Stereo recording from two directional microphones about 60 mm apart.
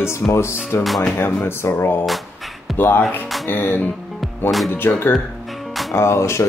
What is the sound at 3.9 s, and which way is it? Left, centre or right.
Music, centre.